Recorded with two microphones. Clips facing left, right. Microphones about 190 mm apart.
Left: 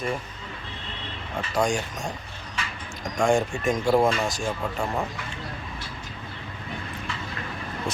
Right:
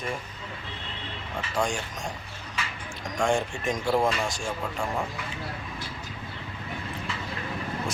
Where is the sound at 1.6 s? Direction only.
40° left (ahead or behind).